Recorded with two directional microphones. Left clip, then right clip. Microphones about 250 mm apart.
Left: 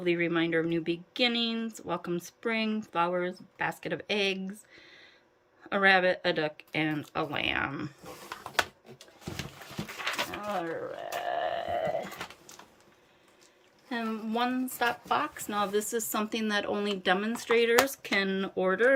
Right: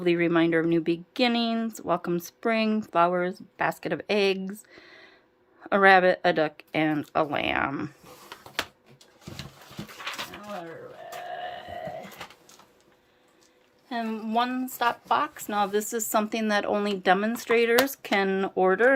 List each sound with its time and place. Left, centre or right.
0.0 s a woman's voice: right
10.0 s a sound: centre
13.9 s a woman's voice: centre